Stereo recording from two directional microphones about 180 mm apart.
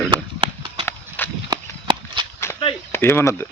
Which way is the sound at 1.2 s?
10° left (ahead or behind).